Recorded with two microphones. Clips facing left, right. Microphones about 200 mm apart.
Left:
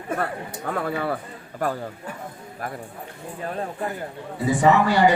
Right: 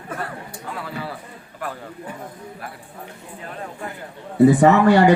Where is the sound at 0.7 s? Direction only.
55° left (ahead or behind).